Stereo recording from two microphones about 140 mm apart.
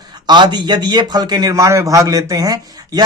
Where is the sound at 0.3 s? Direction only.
30° right (ahead or behind).